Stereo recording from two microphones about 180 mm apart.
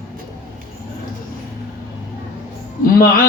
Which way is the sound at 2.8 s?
55° left (ahead or behind).